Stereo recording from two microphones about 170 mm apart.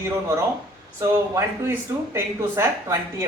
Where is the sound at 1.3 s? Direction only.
15° right (ahead or behind).